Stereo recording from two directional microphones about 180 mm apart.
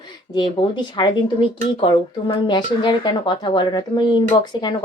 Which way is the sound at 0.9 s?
25° left (ahead or behind).